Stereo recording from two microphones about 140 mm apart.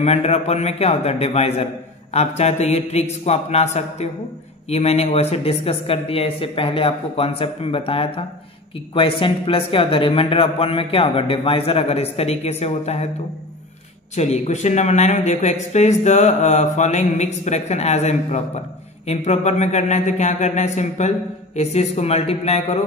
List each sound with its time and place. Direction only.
0.0 s a man's voice: 50° left (ahead or behind)
14.1 s a man's voice: 55° left (ahead or behind)